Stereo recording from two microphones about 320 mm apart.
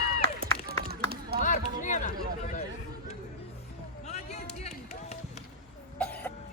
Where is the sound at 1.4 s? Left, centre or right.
Left.